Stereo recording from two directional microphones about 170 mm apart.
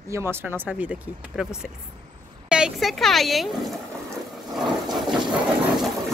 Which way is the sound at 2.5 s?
5° right (ahead or behind).